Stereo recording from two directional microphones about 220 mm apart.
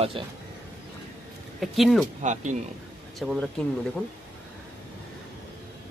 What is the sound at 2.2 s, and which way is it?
Speech, 35° right (ahead or behind).